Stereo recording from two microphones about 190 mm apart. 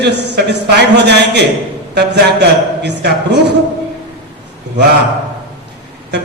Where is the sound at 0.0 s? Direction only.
60° right (ahead or behind).